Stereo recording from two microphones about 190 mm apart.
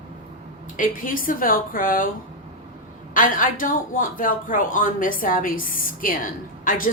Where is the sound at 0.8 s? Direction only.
45° left (ahead or behind).